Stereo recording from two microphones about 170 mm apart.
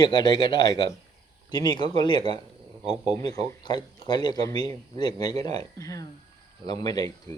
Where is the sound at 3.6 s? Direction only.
25° left (ahead or behind).